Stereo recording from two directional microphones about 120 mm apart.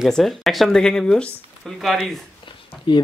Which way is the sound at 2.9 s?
40° left (ahead or behind).